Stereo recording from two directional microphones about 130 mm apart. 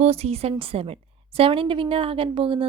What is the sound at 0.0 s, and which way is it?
A woman's voice, 50° right (ahead or behind).